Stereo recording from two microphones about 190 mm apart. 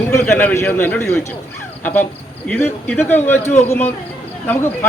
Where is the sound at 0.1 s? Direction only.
10° left (ahead or behind).